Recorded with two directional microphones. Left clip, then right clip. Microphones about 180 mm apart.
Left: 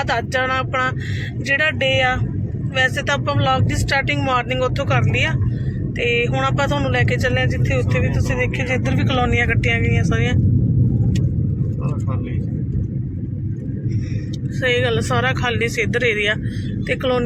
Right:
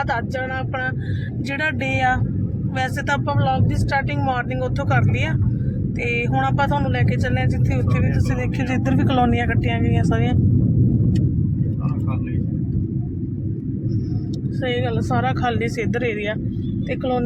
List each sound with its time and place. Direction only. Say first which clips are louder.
0.1 s a sound: left 5 dB; 10° left (ahead or behind)
1.5 s speech: left 6 dB; 10° right (ahead or behind)
3.2 s speech: left 3 dB; 5° left (ahead or behind)
6.6 s speech: left 2 dB; 5° left (ahead or behind)
8.5 s speech: left 1 dB; 30° right (ahead or behind)
14.6 s speech: left 6 dB; 15° right (ahead or behind)
15.4 s speech: left 2 dB; 20° right (ahead or behind)